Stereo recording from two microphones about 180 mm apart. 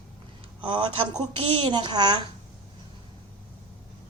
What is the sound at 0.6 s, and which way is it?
A woman's voice, 25° right (ahead or behind).